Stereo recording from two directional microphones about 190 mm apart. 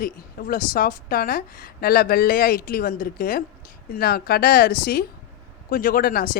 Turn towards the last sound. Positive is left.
turn(degrees=50)  # may be behind; listen again after turning